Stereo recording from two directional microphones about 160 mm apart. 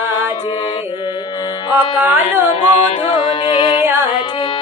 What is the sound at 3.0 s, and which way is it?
Music, 35° left (ahead or behind).